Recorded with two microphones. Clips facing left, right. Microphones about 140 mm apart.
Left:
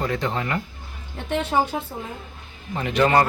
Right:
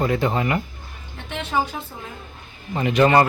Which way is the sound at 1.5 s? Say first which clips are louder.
Left 1 dB; 35° left (ahead or behind).